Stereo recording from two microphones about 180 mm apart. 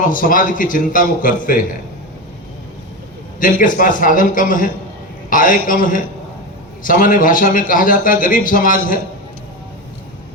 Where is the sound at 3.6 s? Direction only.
45° left (ahead or behind).